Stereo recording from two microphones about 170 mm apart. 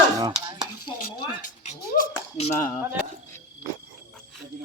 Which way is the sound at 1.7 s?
40° left (ahead or behind).